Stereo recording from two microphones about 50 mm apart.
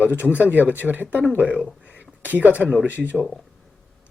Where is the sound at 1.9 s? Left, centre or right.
Right.